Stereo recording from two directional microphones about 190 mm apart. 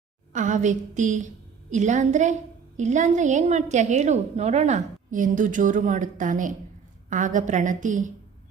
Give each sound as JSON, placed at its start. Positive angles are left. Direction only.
{"t": 0.3, "sound": "a woman's voice", "side_deg": -40}